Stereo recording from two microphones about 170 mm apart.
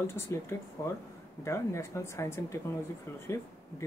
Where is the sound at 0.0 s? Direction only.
15° left (ahead or behind).